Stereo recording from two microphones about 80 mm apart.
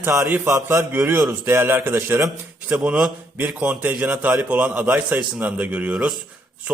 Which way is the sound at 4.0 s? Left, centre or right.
Centre.